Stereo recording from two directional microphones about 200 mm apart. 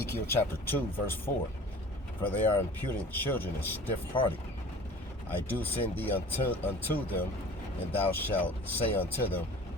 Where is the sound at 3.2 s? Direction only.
10° left (ahead or behind).